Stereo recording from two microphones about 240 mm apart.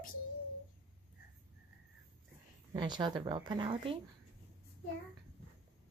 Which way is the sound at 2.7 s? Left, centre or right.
Centre.